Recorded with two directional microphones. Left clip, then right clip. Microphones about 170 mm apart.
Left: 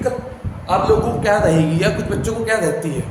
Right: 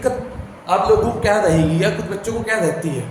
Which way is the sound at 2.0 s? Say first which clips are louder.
Left 2 dB; 20° left (ahead or behind).